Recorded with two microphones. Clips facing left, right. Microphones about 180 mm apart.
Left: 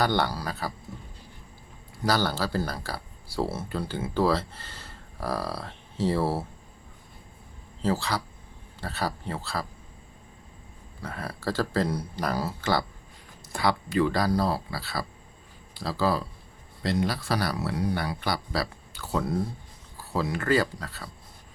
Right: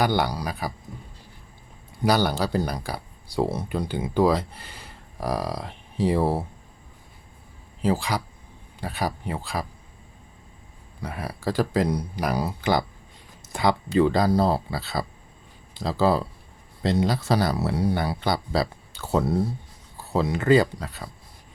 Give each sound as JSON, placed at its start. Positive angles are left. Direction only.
{"t": 0.0, "sound": "speech", "side_deg": -10}
{"t": 2.0, "sound": "speech", "side_deg": -15}
{"t": 7.8, "sound": "speech", "side_deg": -15}
{"t": 11.0, "sound": "speech", "side_deg": -10}